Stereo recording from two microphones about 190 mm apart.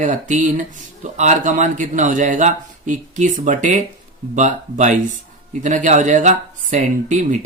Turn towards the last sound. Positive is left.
turn(degrees=-40)  # may be behind; listen again after turning